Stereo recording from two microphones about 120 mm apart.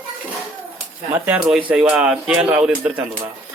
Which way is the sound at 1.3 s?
5° right (ahead or behind).